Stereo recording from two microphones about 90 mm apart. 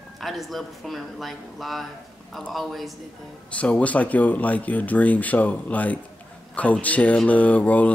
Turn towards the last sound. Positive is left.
turn(degrees=15)  # may be behind; listen again after turning